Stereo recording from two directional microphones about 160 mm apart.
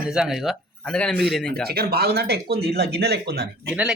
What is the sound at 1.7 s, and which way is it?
Speech, 75° right (ahead or behind).